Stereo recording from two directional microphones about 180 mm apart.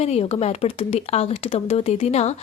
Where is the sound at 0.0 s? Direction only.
35° left (ahead or behind).